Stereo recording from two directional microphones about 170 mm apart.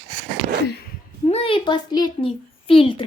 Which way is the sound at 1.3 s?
35° left (ahead or behind).